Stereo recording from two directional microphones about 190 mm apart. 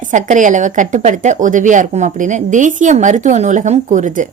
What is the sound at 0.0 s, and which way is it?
A woman's voice, 40° right (ahead or behind).